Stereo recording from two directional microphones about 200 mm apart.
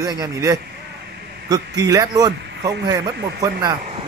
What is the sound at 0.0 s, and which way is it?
A man's voice, 20° right (ahead or behind).